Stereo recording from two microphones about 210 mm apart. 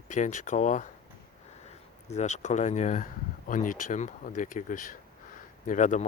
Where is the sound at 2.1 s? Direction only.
35° left (ahead or behind).